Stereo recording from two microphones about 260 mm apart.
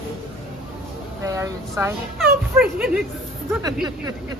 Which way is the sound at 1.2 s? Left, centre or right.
Centre.